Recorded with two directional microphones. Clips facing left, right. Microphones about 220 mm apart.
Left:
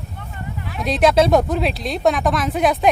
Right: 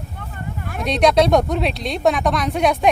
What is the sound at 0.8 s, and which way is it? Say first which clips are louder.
Speech: even; centre (ahead or behind).